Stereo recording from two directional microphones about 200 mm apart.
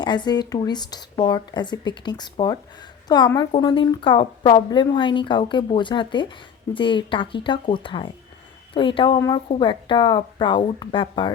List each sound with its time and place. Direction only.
0.0 s a woman's voice: 20° left (ahead or behind)